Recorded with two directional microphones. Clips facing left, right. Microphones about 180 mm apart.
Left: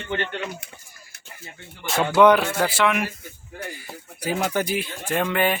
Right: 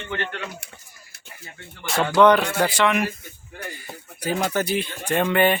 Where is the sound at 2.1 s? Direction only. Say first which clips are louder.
Even; 10° left (ahead or behind).